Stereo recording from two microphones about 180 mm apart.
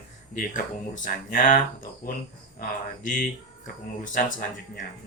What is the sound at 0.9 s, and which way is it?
Speech, 45° left (ahead or behind).